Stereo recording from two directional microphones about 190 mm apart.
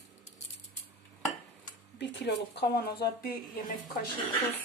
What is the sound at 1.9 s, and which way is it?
Speech, 65° left (ahead or behind).